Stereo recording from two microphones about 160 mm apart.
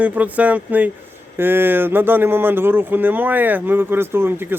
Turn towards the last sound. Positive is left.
turn(degrees=-15)  # may be behind; listen again after turning